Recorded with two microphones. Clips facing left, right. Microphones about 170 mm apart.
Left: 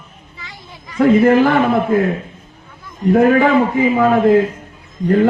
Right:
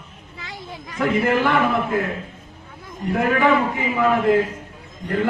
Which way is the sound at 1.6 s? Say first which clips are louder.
Left 6 dB; 35° left (ahead or behind).